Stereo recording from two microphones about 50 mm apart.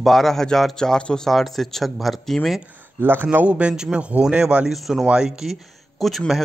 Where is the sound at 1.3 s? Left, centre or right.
Centre.